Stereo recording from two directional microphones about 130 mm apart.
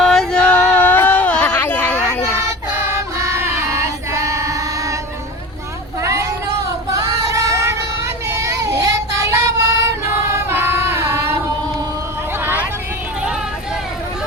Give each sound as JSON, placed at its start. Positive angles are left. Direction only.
{"t": 0.0, "sound": "a sound", "side_deg": 0}
{"t": 2.7, "sound": "choir", "side_deg": -20}
{"t": 6.0, "sound": "vehicle", "side_deg": -25}
{"t": 6.9, "sound": "child singing", "side_deg": -25}
{"t": 10.3, "sound": "music", "side_deg": -15}